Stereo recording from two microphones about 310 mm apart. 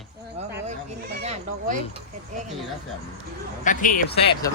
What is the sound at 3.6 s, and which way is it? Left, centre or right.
Speech, left.